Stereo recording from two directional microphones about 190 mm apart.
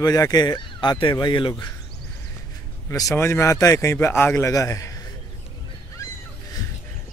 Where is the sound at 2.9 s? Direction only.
15° left (ahead or behind).